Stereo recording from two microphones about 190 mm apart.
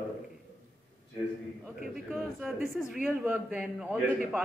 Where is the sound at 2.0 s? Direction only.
5° right (ahead or behind).